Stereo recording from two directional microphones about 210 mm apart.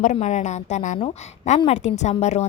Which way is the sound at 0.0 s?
35° left (ahead or behind).